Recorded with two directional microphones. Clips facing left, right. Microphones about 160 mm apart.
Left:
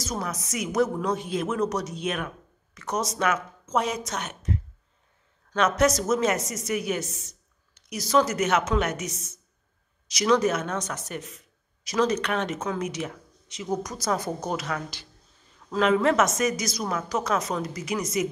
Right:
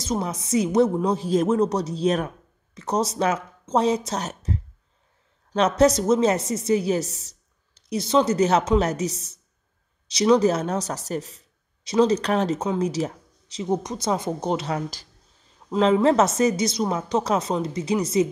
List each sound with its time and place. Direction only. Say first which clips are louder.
0.0 s a woman's voice: right 5 dB; 25° right (ahead or behind)